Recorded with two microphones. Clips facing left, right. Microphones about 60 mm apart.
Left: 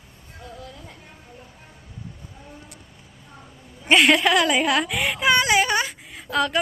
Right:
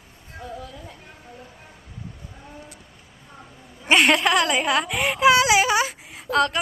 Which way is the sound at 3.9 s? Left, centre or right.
Centre.